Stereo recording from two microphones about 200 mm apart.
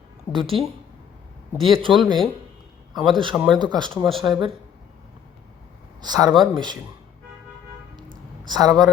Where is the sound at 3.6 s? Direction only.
20° right (ahead or behind).